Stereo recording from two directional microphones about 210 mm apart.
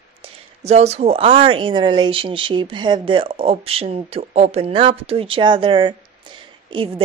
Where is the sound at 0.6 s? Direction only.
30° right (ahead or behind).